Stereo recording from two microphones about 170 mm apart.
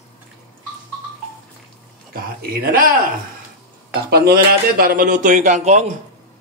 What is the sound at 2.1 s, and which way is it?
Speech, 65° right (ahead or behind).